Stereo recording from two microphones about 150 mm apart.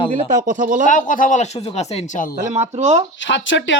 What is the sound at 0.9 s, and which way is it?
Speech, 60° left (ahead or behind).